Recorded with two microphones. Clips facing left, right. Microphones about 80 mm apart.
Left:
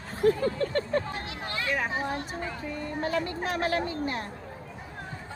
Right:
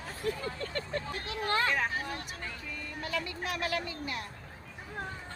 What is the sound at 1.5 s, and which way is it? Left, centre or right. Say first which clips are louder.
Vehicle: right 4 dB; right.